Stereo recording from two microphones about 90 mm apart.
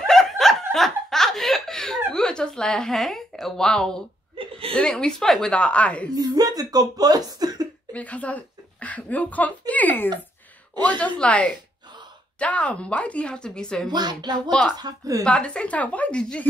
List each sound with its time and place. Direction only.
0.0 s snicker: 5° left (ahead or behind)
4.4 s chuckle: 90° right
4.7 s speech: 10° left (ahead or behind)
6.1 s speech: 45° right (ahead or behind)
7.9 s speech: 15° left (ahead or behind)
13.8 s speech: 50° right (ahead or behind)
15.2 s speech: 10° left (ahead or behind)